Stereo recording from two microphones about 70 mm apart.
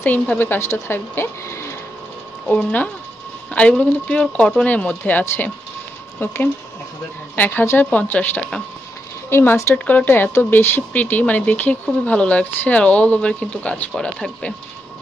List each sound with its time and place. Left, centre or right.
0.0 s speech: left
2.4 s speech: left
8.4 s speech: centre
9.3 s speech: left; by 14.3 s centre